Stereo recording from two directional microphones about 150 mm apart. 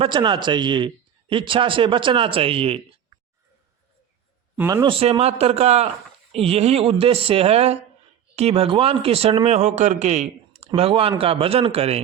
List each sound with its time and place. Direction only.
0.0 s a man's voice: 30° right (ahead or behind)
4.5 s speech: 20° right (ahead or behind)
4.9 s a man's voice: 40° right (ahead or behind)
10.8 s a man's voice: 40° right (ahead or behind)